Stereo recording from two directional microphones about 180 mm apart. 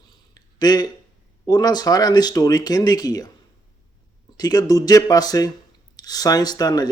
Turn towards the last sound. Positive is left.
turn(degrees=20)  # may be behind; listen again after turning